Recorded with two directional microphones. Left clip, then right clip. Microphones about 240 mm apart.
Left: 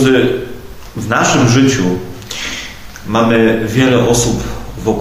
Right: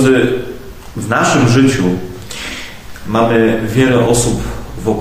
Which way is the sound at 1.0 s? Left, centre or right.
Centre.